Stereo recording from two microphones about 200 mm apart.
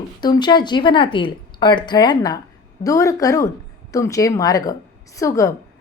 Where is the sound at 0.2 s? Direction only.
20° left (ahead or behind).